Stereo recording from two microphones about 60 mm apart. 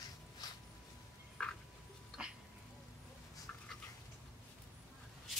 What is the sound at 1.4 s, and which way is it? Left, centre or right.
Frog, centre.